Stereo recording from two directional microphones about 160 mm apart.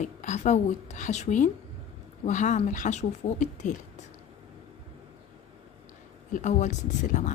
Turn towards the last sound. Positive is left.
turn(degrees=50)  # may be behind; listen again after turning